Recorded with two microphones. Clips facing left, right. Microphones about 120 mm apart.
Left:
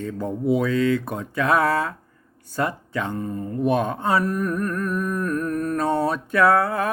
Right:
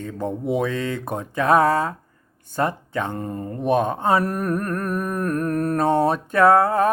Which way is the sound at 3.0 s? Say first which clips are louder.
Left 1 dB; 45° right (ahead or behind).